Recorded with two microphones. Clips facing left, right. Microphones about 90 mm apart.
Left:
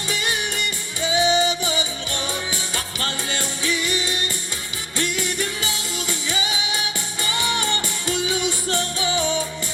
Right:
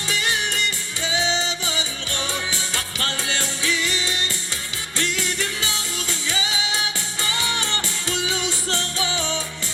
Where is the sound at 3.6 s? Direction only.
20° left (ahead or behind).